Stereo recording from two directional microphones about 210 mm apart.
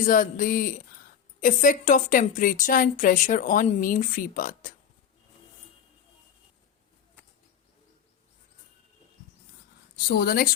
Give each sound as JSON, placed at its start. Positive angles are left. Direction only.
{"t": 0.0, "sound": "speech", "side_deg": 40}
{"t": 9.9, "sound": "a woman's voice", "side_deg": 45}